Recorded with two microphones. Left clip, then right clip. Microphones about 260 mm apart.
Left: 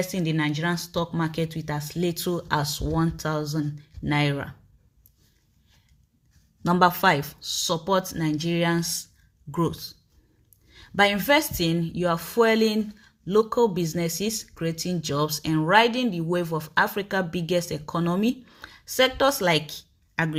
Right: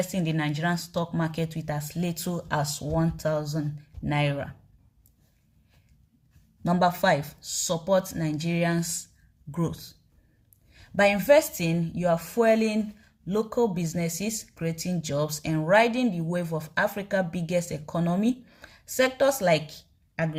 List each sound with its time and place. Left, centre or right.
0.0 s speech: centre
6.6 s speech: centre